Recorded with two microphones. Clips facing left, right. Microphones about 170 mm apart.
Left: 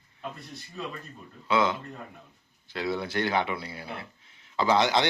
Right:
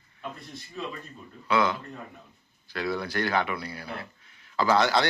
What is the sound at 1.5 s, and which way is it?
Speech, 25° left (ahead or behind).